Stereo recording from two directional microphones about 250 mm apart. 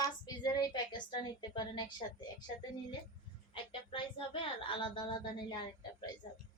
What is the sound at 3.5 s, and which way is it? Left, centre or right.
A woman's voice, centre.